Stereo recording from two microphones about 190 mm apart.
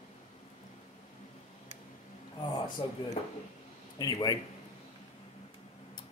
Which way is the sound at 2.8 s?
30° left (ahead or behind).